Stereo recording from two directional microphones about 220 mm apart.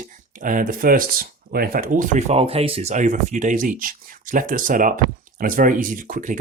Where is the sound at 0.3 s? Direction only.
40° right (ahead or behind).